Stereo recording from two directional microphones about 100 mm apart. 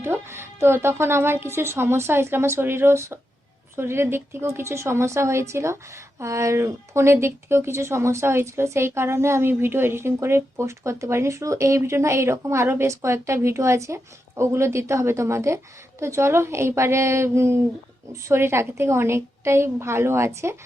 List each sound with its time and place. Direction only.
0.0 s a woman's voice: 25° right (ahead or behind)